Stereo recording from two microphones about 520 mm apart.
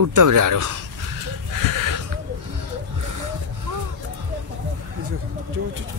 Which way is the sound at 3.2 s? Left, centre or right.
Right.